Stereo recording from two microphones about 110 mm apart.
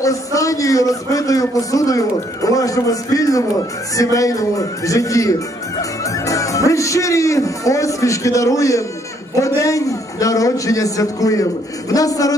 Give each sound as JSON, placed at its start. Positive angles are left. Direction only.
{"t": 0.0, "sound": "a man's voice", "side_deg": 30}